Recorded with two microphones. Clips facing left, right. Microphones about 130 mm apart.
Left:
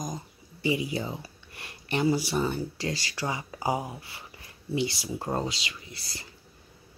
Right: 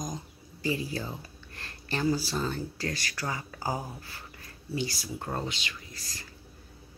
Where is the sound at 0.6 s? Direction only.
15° left (ahead or behind).